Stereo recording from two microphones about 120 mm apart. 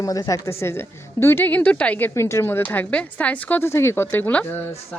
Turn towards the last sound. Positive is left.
turn(degrees=15)  # may be behind; listen again after turning